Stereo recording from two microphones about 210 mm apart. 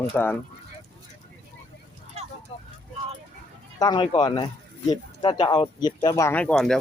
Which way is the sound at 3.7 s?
20° left (ahead or behind).